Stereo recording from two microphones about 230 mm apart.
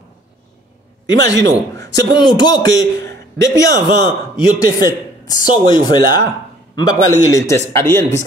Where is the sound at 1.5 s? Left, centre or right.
Centre.